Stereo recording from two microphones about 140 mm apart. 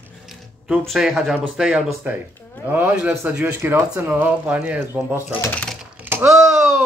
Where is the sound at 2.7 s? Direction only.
15° right (ahead or behind).